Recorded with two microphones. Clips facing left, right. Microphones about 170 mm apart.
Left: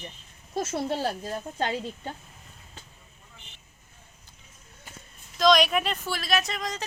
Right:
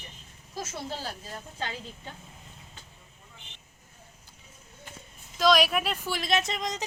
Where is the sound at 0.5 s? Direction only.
65° left (ahead or behind).